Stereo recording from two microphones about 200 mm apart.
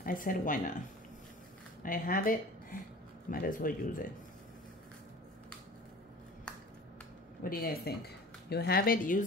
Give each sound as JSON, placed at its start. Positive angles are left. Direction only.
{"t": 0.0, "sound": "speech", "side_deg": 45}
{"t": 7.4, "sound": "speech", "side_deg": 50}